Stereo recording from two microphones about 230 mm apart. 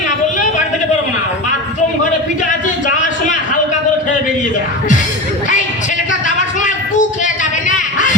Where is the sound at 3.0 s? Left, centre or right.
Left.